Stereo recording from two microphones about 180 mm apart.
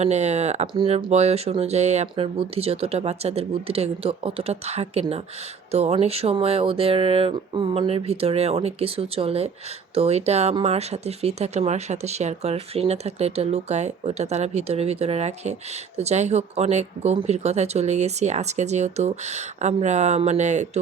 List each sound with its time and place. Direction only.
0.0 s speech: 40° right (ahead or behind)